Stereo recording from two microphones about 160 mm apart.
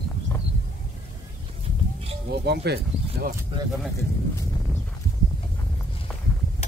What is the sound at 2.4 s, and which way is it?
Speech, 90° right.